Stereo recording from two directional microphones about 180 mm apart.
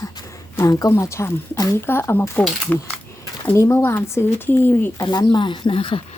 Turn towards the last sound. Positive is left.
turn(degrees=30)  # may be behind; listen again after turning